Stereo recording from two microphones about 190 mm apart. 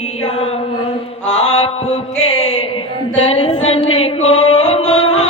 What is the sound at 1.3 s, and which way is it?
Mantra, 35° left (ahead or behind).